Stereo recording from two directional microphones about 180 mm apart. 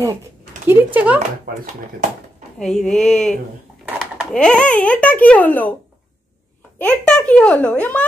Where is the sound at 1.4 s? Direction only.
55° right (ahead or behind).